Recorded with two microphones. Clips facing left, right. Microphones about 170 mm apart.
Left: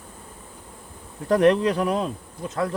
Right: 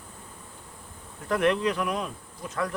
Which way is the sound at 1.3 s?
35° left (ahead or behind).